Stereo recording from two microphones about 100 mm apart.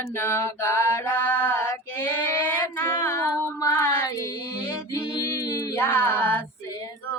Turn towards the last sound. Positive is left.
turn(degrees=20)  # may be behind; listen again after turning